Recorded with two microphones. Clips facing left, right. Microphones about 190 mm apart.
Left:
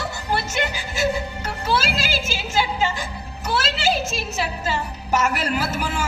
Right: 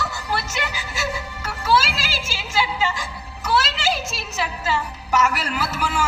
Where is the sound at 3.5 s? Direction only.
50° left (ahead or behind).